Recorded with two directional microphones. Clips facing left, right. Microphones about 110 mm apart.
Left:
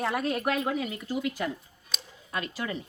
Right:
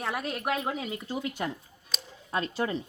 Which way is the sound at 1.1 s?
30° right (ahead or behind).